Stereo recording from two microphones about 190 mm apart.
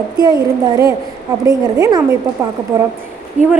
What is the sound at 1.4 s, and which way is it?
Speech, 15° right (ahead or behind).